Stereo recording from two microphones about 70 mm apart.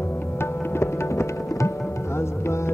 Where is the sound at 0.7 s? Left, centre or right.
Left.